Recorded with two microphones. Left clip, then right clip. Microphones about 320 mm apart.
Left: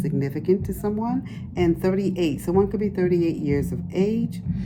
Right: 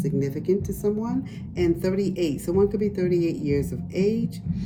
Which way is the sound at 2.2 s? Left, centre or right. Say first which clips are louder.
Even; centre.